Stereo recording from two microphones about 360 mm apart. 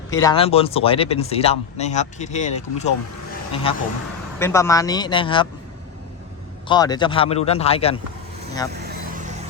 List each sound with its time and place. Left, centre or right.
0.1 s speech: centre
6.7 s speech: centre
8.7 s vehicle: right